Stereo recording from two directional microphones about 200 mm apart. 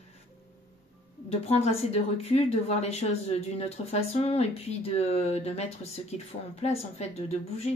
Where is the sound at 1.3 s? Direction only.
30° left (ahead or behind).